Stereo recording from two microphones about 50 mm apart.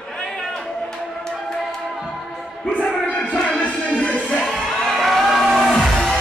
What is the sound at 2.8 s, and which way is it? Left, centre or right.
Music, left.